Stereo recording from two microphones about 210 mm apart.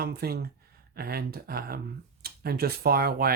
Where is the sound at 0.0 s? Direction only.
50° right (ahead or behind).